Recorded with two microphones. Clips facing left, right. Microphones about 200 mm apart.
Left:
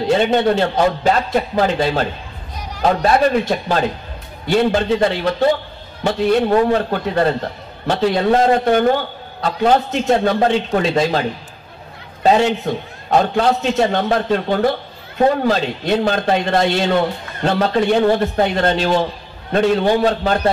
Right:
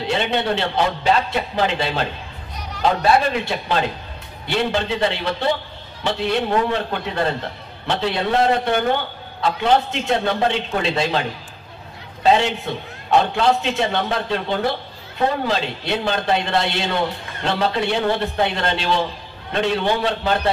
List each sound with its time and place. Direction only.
0.0 s a man's voice: 45° left (ahead or behind)
6.7 s a man's voice: 40° left (ahead or behind)